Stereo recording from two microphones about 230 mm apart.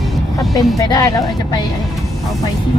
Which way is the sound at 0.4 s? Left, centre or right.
Centre.